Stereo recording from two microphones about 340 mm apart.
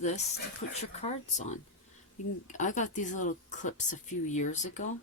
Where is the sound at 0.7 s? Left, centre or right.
Centre.